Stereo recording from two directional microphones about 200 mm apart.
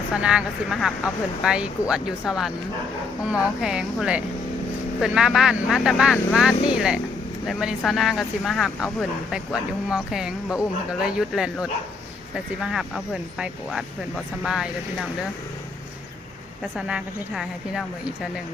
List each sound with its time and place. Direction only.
0.1 s speech: 5° right (ahead or behind)
13.4 s speech: centre (ahead or behind)
16.7 s speech: 5° right (ahead or behind)